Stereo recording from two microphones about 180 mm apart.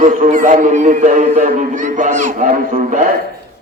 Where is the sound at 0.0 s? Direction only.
50° right (ahead or behind).